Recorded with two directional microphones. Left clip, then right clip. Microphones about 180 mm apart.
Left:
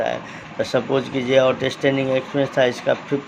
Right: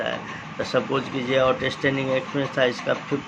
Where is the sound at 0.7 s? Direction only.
30° left (ahead or behind).